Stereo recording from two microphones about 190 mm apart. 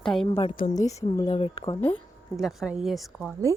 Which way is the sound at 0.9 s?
35° left (ahead or behind).